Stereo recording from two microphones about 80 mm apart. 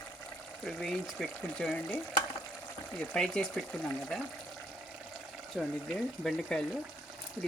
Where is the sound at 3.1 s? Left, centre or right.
Centre.